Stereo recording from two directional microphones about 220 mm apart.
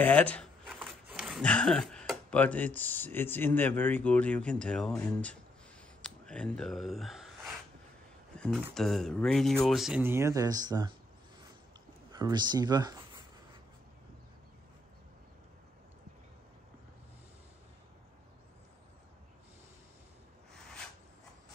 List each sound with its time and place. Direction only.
0.0 s speech: 5° left (ahead or behind)
6.0 s a sound: 5° left (ahead or behind)
8.4 s speech: 5° left (ahead or behind); by 10.9 s 15° right (ahead or behind)
12.1 s speech: 20° right (ahead or behind)